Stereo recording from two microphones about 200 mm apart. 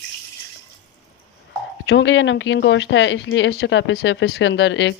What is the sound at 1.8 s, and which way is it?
Speech, 65° left (ahead or behind).